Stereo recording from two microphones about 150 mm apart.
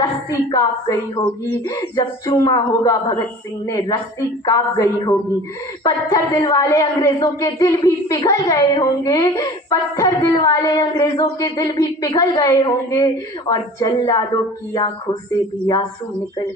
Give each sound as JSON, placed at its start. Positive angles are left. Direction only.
{"t": 0.3, "sound": "speech", "side_deg": 25}
{"t": 1.5, "sound": "a sound", "side_deg": 15}
{"t": 2.2, "sound": "speech", "side_deg": 20}